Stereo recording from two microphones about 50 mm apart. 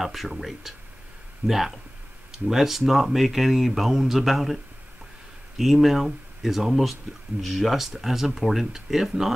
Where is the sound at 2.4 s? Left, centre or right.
Centre.